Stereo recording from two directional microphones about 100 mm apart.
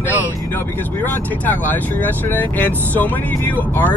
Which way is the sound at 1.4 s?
15° left (ahead or behind).